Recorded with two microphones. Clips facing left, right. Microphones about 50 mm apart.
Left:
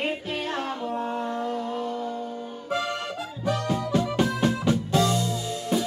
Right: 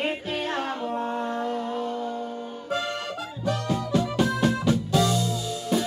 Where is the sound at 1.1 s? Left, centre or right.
Right.